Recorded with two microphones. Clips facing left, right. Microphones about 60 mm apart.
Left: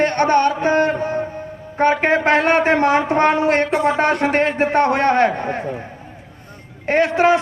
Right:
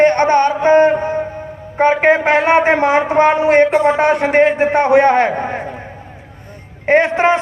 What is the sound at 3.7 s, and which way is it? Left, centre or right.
Speech, right.